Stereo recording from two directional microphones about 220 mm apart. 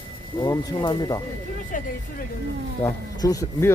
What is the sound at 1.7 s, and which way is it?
Speech, 35° left (ahead or behind).